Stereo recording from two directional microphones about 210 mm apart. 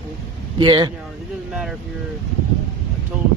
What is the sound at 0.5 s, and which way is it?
Speech, 20° right (ahead or behind).